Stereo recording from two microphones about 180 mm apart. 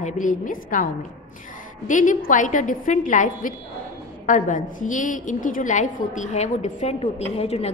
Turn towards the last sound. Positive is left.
turn(degrees=35)  # may be behind; listen again after turning